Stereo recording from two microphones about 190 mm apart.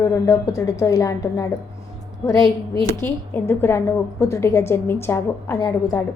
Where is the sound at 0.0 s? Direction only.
15° left (ahead or behind).